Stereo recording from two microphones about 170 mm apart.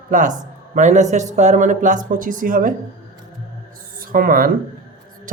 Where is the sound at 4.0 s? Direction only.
55° right (ahead or behind).